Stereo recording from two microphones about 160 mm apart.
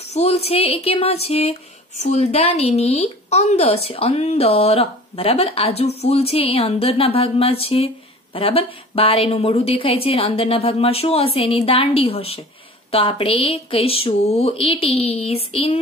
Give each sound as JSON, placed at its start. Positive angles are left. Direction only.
{"t": 0.1, "sound": "speech", "side_deg": 40}